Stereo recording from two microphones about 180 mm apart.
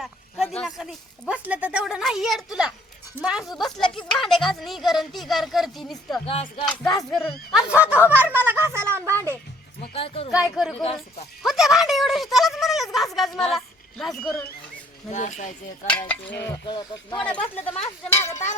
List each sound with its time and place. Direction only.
0.6 s speech: centre (ahead or behind)
6.2 s speech: 35° left (ahead or behind)
6.7 s speech: centre (ahead or behind); by 9.4 s 15° right (ahead or behind)
9.9 s speech: 35° left (ahead or behind)
10.3 s speech: 5° right (ahead or behind)
10.8 s speech: 35° left (ahead or behind)
11.4 s speech: centre (ahead or behind)
15.1 s speech: 45° left (ahead or behind)
16.6 s speech: 25° left (ahead or behind)
17.2 s speech: 5° left (ahead or behind)